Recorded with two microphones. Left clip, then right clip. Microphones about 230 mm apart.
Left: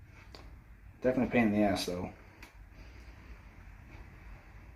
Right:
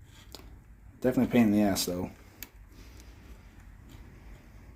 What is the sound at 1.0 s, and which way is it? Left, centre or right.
Speech, right.